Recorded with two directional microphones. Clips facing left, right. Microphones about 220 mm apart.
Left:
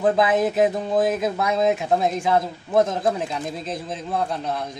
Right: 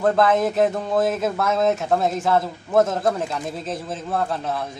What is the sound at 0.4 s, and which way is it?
A man's voice, centre (ahead or behind).